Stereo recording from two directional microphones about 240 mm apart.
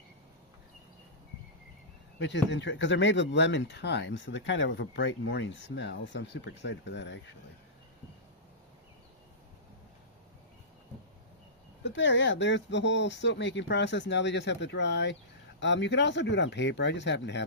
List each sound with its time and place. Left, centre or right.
2.1 s speech: left
11.8 s speech: left